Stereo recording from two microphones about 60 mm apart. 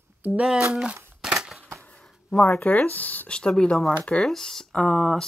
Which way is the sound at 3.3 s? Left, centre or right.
Centre.